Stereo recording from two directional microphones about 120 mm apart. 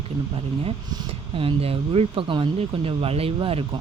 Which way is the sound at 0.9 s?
50° right (ahead or behind).